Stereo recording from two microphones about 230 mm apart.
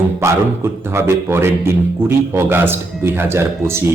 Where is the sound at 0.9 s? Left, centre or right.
Centre.